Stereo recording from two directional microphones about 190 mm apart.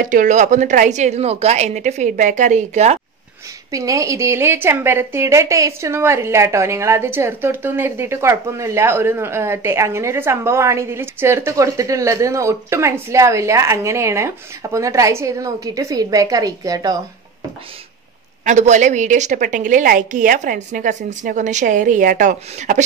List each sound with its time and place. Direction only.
0.0 s a woman's voice: 45° right (ahead or behind)
3.7 s a woman's voice: 15° right (ahead or behind)
18.4 s a woman's voice: 40° right (ahead or behind)